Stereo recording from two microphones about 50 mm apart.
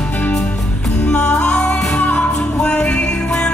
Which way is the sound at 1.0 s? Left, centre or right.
Left.